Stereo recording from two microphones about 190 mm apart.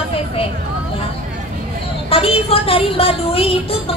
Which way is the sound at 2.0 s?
30° left (ahead or behind).